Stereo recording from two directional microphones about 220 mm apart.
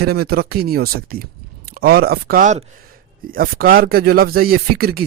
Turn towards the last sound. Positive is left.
turn(degrees=-45)  # may be behind; listen again after turning